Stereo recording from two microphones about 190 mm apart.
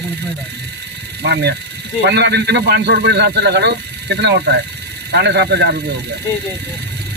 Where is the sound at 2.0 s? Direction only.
60° right (ahead or behind).